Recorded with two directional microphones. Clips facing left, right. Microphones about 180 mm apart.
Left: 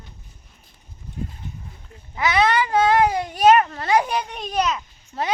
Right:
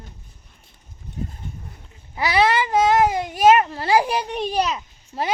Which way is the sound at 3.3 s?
25° right (ahead or behind).